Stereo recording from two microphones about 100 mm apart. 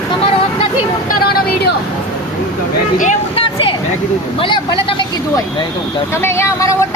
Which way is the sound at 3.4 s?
75° left (ahead or behind).